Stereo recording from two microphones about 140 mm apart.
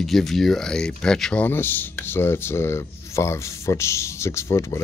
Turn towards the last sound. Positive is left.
turn(degrees=20)  # may be behind; listen again after turning